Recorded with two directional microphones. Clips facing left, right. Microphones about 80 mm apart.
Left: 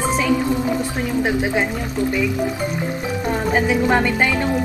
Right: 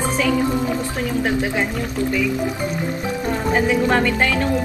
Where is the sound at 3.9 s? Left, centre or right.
Centre.